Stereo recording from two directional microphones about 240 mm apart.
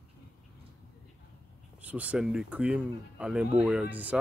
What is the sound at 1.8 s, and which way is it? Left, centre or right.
Speech, centre.